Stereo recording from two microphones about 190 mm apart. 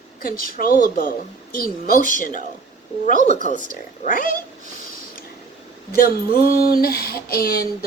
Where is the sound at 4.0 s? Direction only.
45° left (ahead or behind).